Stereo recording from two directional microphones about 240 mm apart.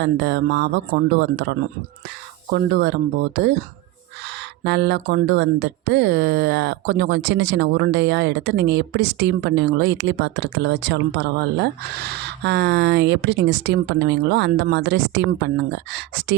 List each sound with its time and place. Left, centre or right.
0.0 s speech: right
4.6 s speech: right